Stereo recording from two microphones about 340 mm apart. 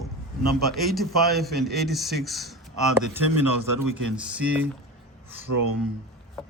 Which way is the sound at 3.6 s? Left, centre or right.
Right.